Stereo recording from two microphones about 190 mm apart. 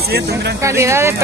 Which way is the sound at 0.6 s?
15° right (ahead or behind).